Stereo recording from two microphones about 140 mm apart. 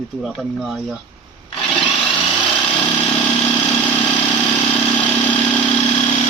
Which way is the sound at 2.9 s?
35° left (ahead or behind).